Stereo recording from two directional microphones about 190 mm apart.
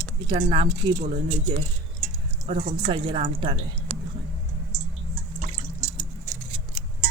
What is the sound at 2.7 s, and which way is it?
Speech, 30° right (ahead or behind).